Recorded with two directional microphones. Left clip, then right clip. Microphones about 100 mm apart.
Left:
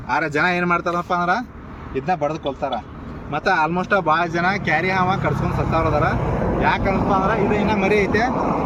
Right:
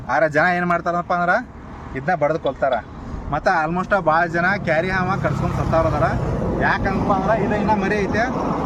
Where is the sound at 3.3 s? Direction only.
40° right (ahead or behind).